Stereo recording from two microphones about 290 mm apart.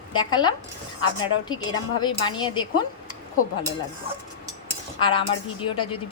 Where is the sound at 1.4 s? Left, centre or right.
Centre.